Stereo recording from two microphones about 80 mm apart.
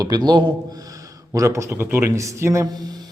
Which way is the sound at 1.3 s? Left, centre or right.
Right.